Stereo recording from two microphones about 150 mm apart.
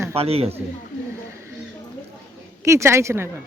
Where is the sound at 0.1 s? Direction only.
40° right (ahead or behind).